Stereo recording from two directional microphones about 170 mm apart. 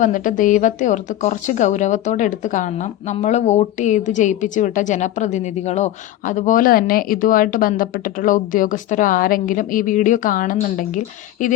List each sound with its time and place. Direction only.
0.0 s speech: 50° left (ahead or behind)